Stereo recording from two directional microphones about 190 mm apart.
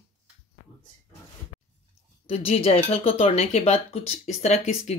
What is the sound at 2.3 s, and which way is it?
Speech, 35° left (ahead or behind).